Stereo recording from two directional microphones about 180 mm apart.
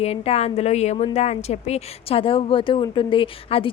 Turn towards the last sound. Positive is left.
turn(degrees=30)  # may be behind; listen again after turning